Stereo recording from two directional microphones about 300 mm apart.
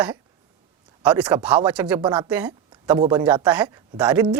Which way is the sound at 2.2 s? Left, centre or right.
Centre.